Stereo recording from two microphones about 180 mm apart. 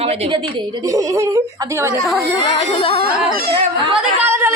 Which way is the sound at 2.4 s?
30° left (ahead or behind).